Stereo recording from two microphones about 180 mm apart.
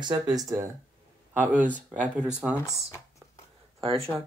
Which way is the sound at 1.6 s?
10° right (ahead or behind).